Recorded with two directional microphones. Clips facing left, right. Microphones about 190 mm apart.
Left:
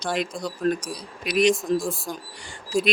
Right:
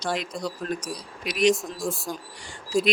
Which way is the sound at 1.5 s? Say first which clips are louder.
Left 6 dB; centre (ahead or behind).